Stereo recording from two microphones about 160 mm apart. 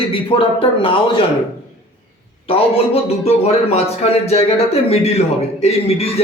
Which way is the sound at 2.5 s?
40° left (ahead or behind).